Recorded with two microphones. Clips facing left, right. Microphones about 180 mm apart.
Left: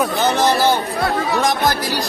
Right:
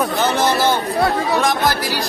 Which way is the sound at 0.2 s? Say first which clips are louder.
Left 1 dB; 15° left (ahead or behind).